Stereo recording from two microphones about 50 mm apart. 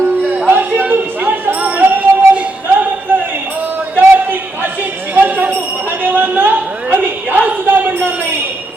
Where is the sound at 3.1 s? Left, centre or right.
Right.